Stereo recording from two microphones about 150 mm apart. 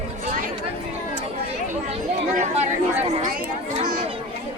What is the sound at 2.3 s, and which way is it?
Chatter, 50° right (ahead or behind).